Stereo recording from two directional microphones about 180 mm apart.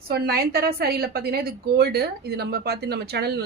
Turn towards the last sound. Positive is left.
turn(degrees=-65)  # may be behind; listen again after turning